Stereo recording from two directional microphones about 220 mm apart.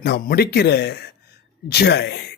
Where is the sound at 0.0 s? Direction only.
45° left (ahead or behind).